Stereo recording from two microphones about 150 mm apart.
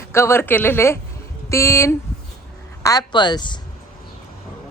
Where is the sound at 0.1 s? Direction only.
15° left (ahead or behind).